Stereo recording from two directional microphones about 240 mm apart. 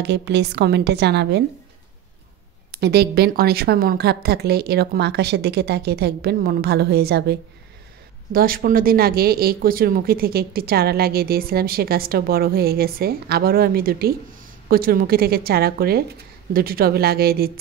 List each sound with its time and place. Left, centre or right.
0.0 s a woman's voice: right
2.8 s speech: right